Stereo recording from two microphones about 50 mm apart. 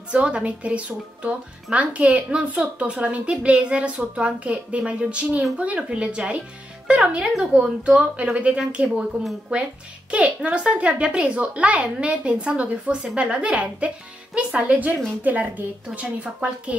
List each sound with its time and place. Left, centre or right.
0.1 s a child's voice: right
12.8 s a child's voice: centre